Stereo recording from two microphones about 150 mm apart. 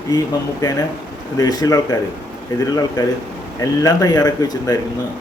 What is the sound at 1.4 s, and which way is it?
A man's voice, 25° left (ahead or behind).